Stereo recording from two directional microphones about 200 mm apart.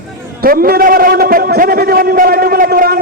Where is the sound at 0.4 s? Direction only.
45° right (ahead or behind).